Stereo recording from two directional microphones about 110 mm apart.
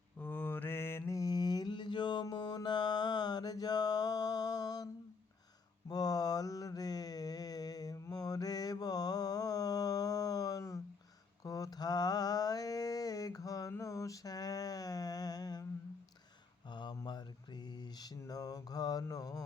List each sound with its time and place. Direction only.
0.2 s mantra: 15° left (ahead or behind); by 4.9 s 35° left (ahead or behind)
5.9 s mantra: 35° left (ahead or behind)
16.6 s mantra: 40° left (ahead or behind)